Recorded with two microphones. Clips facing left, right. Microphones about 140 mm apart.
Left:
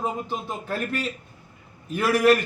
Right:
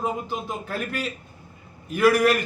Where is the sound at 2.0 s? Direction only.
30° left (ahead or behind).